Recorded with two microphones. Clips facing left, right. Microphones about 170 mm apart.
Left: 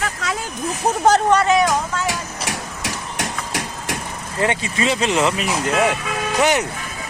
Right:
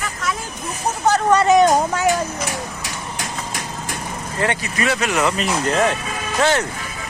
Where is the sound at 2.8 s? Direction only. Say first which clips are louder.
Left 3 dB; 70° left (ahead or behind).